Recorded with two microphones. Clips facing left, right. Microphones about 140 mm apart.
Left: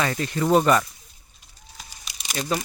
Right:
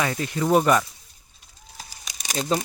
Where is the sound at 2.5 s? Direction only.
30° right (ahead or behind).